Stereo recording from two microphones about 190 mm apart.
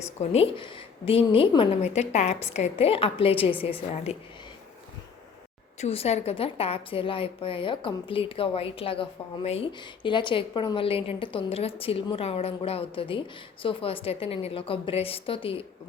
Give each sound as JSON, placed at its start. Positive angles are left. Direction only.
{"t": 0.0, "sound": "a woman's voice", "side_deg": 35}
{"t": 5.8, "sound": "a woman's voice", "side_deg": 30}